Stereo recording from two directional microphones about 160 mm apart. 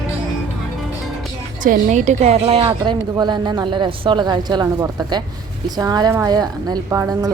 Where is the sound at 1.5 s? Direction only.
55° right (ahead or behind); by 2.6 s 40° right (ahead or behind).